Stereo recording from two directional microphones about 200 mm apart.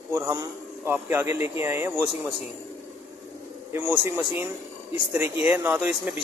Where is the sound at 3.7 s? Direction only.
10° right (ahead or behind).